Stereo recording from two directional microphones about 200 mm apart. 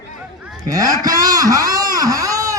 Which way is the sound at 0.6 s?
20° right (ahead or behind).